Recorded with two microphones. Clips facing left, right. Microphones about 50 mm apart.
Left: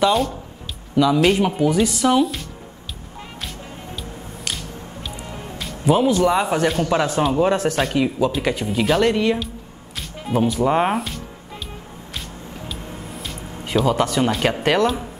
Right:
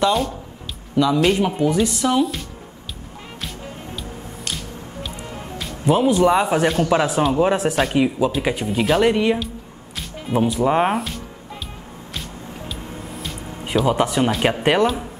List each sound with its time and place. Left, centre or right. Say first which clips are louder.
0.0 s speech: left 1 dB; centre
5.0 s speech: even; centre
12.6 s music: even; centre
13.8 s speech: right 1 dB; centre